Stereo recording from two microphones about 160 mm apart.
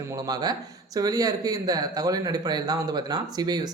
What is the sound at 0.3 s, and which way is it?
Speech, 25° right (ahead or behind).